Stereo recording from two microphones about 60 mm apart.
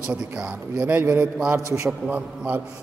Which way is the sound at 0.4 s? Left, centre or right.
Right.